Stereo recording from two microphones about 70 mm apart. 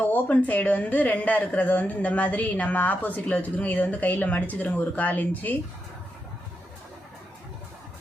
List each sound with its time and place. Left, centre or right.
0.0 s speech: left